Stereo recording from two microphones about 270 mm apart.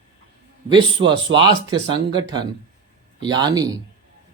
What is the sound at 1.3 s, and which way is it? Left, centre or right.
Speech, centre.